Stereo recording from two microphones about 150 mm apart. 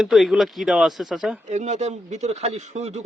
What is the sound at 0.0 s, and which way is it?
Speech, centre (ahead or behind).